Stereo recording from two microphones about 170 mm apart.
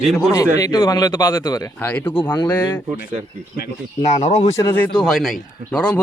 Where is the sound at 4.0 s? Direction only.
45° left (ahead or behind).